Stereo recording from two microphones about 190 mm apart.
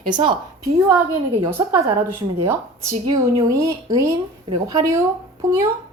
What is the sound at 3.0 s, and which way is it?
Speech, 30° right (ahead or behind).